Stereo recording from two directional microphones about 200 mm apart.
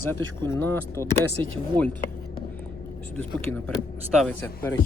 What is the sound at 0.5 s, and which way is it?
Speech, 15° left (ahead or behind).